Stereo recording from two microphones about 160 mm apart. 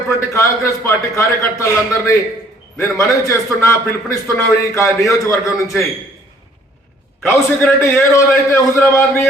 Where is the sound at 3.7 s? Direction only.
20° left (ahead or behind).